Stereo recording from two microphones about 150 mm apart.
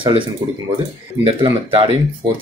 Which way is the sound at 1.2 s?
35° right (ahead or behind).